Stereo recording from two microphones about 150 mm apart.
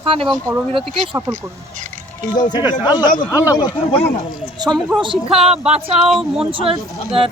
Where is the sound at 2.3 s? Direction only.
30° left (ahead or behind).